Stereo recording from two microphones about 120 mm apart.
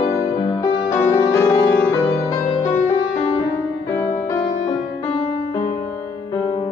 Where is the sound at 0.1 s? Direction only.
30° left (ahead or behind).